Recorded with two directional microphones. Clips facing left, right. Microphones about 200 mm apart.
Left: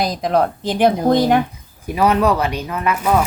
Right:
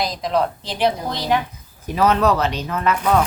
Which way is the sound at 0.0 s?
50° left (ahead or behind).